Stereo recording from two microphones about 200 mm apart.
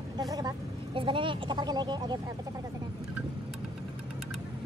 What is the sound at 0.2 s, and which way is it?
Speech, 20° right (ahead or behind).